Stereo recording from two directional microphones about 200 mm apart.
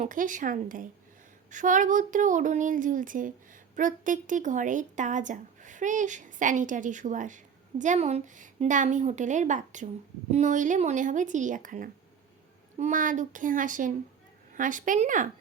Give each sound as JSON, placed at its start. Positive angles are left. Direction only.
{"t": 0.0, "sound": "speech", "side_deg": -40}